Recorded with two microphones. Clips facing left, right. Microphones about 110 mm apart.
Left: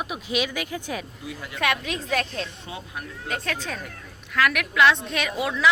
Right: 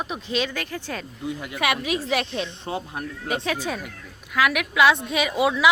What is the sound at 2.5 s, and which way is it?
Speech, 30° right (ahead or behind).